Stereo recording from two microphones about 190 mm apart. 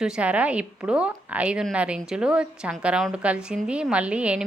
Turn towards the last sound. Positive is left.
turn(degrees=-5)  # may be behind; listen again after turning